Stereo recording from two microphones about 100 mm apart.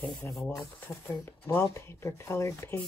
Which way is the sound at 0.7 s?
20° left (ahead or behind).